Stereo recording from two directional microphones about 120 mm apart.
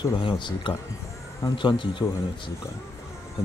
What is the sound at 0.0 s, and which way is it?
Speech, 45° left (ahead or behind).